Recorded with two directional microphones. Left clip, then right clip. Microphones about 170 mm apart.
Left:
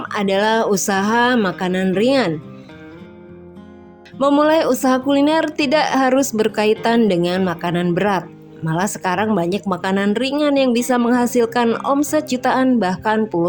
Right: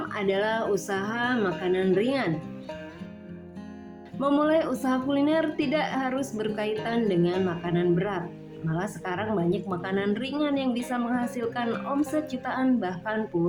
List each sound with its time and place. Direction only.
0.1 s a woman's voice: 65° left (ahead or behind)
4.2 s a woman's voice: 65° left (ahead or behind)